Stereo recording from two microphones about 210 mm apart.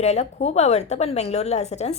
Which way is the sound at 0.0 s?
30° left (ahead or behind).